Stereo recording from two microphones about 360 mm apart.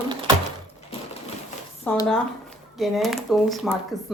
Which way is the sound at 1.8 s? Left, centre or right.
Centre.